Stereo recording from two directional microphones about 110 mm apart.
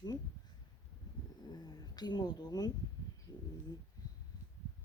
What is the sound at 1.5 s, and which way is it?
Speech, 40° left (ahead or behind).